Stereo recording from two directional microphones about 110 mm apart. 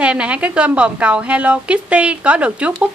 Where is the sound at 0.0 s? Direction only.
10° right (ahead or behind).